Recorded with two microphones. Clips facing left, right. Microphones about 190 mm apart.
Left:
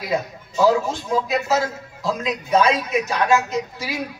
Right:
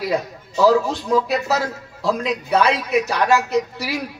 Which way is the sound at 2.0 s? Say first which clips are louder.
Right 3 dB; 65° right (ahead or behind).